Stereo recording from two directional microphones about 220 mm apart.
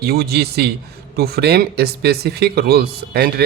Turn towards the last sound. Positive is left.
turn(degrees=-45)  # may be behind; listen again after turning